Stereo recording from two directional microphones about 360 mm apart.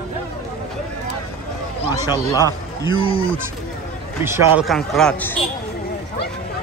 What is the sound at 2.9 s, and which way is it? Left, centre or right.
Speech, right.